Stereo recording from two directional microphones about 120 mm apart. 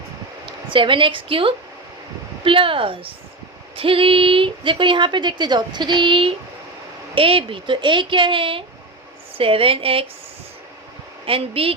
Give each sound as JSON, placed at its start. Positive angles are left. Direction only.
{"t": 0.7, "sound": "speech", "side_deg": -45}
{"t": 11.3, "sound": "speech", "side_deg": -50}